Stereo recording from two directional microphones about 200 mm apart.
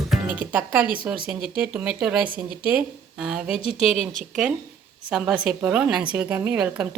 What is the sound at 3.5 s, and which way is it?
Speech, 30° left (ahead or behind).